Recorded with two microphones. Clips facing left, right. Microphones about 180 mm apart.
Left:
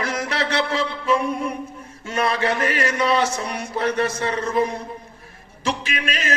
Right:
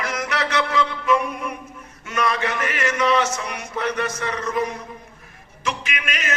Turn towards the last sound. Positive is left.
turn(degrees=30)  # may be behind; listen again after turning